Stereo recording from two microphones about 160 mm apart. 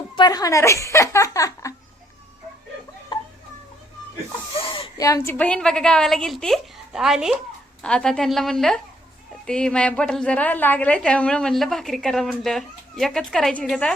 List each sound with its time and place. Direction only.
0.2 s speech: 25° left (ahead or behind)
3.1 s a sound: 30° left (ahead or behind)
4.7 s a woman's voice: 25° left (ahead or behind); by 13.9 s 5° left (ahead or behind)